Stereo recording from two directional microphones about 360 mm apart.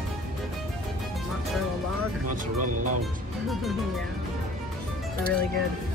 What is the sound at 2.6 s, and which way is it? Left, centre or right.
Speech, right.